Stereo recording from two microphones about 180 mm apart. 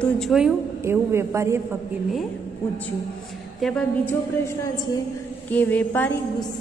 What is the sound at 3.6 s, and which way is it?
A woman's voice, 5° left (ahead or behind).